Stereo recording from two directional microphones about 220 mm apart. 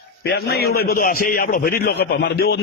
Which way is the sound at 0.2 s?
50° left (ahead or behind).